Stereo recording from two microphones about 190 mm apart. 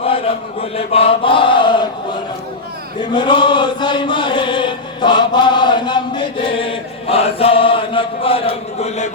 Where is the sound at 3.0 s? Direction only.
25° left (ahead or behind).